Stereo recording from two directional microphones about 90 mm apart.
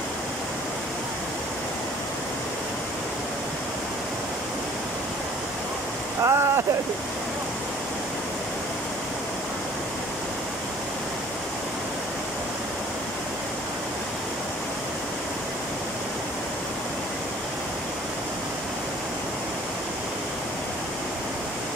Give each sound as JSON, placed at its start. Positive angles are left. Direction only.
{"t": 6.2, "sound": "speech", "side_deg": -30}